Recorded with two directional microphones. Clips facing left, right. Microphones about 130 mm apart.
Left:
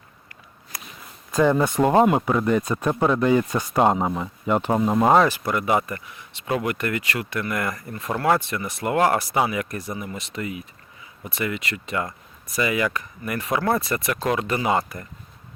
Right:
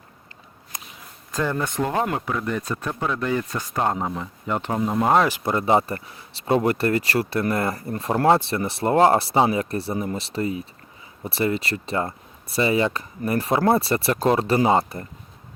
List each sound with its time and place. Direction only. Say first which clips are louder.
0.7 s a sound: even; 20° right (ahead or behind)
1.3 s speech: left 6 dB; 15° left (ahead or behind)
5.3 s speech: right 2 dB; 25° right (ahead or behind)